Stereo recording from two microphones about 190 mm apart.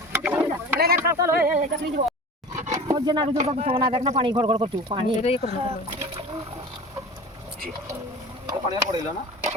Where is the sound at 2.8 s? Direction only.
20° right (ahead or behind).